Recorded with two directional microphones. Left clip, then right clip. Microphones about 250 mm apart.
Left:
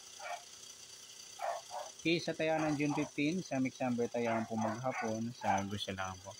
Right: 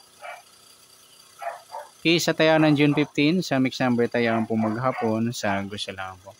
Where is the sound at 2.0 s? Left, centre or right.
Right.